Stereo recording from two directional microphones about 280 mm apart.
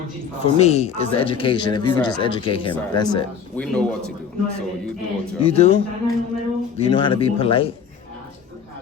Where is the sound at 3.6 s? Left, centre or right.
Centre.